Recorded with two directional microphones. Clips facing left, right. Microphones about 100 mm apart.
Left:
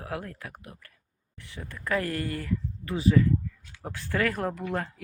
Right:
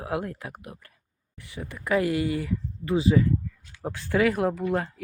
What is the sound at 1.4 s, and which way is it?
Speech, 10° right (ahead or behind).